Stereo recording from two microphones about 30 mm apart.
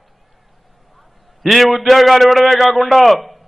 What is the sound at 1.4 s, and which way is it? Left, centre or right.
A man's voice, centre.